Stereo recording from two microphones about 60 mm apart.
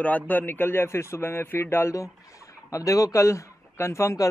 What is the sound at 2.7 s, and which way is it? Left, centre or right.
A man's voice, left.